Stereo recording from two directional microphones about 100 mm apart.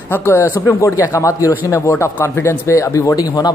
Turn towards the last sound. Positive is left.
turn(degrees=35)  # may be behind; listen again after turning